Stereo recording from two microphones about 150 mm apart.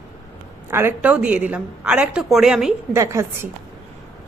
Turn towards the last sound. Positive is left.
turn(degrees=-20)  # may be behind; listen again after turning